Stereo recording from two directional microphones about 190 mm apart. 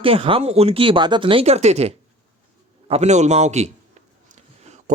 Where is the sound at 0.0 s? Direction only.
30° right (ahead or behind).